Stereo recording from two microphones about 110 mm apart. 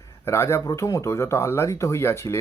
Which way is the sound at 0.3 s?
25° left (ahead or behind).